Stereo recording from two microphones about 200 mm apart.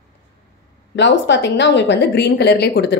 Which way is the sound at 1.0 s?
60° left (ahead or behind).